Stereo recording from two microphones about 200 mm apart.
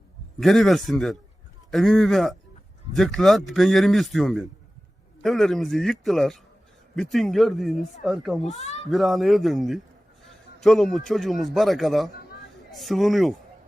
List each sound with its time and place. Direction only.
0.3 s a man's voice: centre (ahead or behind)
8.5 s speech: 35° left (ahead or behind)
8.9 s a man's voice: centre (ahead or behind)